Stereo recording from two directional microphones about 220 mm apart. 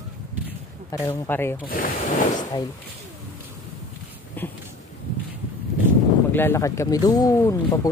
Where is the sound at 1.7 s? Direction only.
35° left (ahead or behind).